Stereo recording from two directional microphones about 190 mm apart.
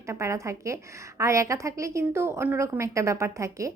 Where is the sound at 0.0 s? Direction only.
15° right (ahead or behind).